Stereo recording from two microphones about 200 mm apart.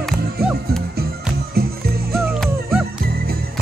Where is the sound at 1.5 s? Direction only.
50° right (ahead or behind).